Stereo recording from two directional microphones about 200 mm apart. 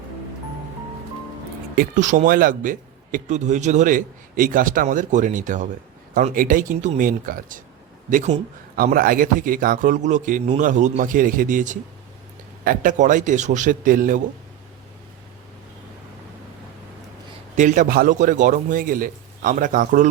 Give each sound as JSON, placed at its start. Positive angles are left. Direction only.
{"t": 1.7, "sound": "a man's voice", "side_deg": -45}
{"t": 8.7, "sound": "a man's voice", "side_deg": -45}
{"t": 17.6, "sound": "a man's voice", "side_deg": -40}